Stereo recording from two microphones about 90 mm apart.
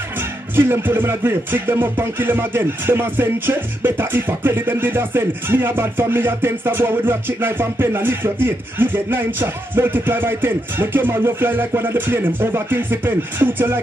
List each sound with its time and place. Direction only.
0.6 s music: 25° right (ahead or behind)